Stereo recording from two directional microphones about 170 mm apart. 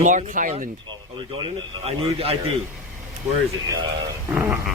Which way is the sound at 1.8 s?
35° right (ahead or behind).